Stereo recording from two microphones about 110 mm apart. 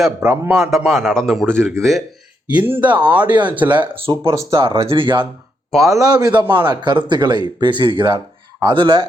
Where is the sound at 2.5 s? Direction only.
15° right (ahead or behind).